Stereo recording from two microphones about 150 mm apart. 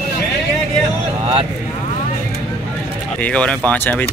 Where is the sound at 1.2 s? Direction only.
40° right (ahead or behind).